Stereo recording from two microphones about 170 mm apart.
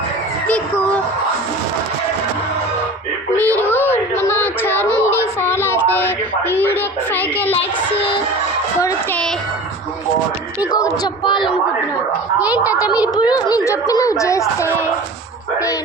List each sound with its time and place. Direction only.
0.4 s a sound: 10° left (ahead or behind)
3.3 s a sound: 10° left (ahead or behind)
4.2 s child singing: 10° left (ahead or behind)
10.7 s speech: 20° left (ahead or behind)
12.4 s a child's voice: 10° right (ahead or behind)
12.7 s speech: 20° left (ahead or behind)